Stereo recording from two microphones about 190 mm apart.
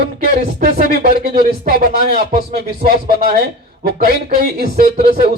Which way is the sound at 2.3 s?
55° right (ahead or behind).